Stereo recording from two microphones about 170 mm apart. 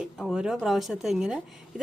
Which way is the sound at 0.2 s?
5° right (ahead or behind).